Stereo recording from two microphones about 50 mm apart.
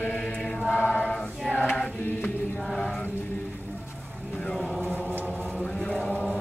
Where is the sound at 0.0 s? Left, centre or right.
Left.